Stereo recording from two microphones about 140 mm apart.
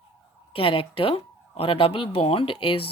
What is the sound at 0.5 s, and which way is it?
Speech, 40° left (ahead or behind).